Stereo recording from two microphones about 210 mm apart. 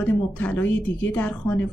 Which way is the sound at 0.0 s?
5° left (ahead or behind).